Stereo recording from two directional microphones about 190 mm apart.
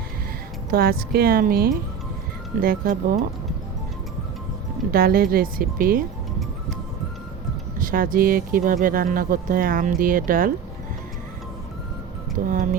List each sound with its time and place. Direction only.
0.7 s speech: 55° right (ahead or behind)
4.9 s speech: 50° right (ahead or behind)
7.8 s speech: 45° right (ahead or behind)